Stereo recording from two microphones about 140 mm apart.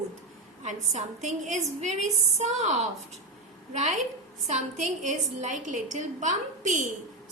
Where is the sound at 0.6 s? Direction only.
60° right (ahead or behind).